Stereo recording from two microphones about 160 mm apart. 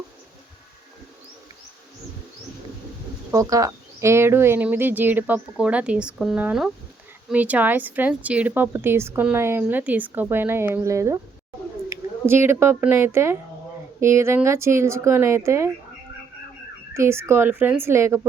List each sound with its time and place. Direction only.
3.3 s a woman's voice: 20° right (ahead or behind)
16.9 s a woman's voice: 15° right (ahead or behind)